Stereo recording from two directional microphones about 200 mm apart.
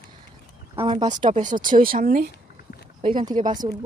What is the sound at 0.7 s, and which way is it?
Speech, 25° right (ahead or behind).